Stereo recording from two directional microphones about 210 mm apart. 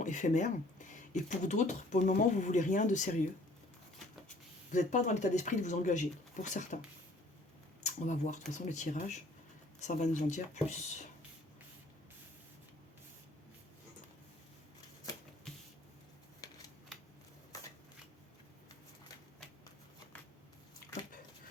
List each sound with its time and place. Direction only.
0.0 s speech: 35° left (ahead or behind)
4.7 s speech: 35° left (ahead or behind)
7.9 s speech: 35° left (ahead or behind)
15.5 s vehicle: centre (ahead or behind)
16.4 s shuffling cards: 15° left (ahead or behind)